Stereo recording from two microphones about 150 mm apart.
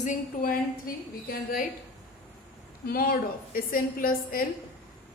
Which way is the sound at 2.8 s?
80° left.